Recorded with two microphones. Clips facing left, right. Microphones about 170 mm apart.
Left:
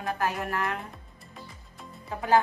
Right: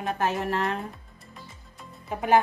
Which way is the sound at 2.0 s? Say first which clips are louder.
Right 2 dB; 20° right (ahead or behind).